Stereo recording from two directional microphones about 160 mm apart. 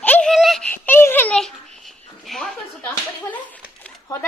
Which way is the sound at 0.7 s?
15° left (ahead or behind).